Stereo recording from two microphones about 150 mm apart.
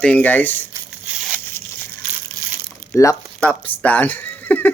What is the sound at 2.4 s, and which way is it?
Crumpling, 25° right (ahead or behind).